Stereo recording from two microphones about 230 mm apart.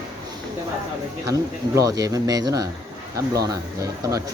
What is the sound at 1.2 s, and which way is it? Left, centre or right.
Speech, centre.